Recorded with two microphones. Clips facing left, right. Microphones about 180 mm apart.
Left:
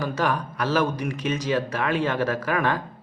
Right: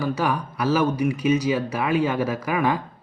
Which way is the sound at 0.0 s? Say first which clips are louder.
Right 1 dB; 10° right (ahead or behind).